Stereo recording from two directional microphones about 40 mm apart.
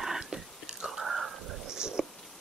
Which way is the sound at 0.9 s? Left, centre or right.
Centre.